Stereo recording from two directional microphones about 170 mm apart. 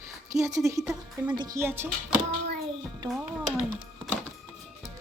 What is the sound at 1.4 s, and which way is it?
Music, 20° right (ahead or behind).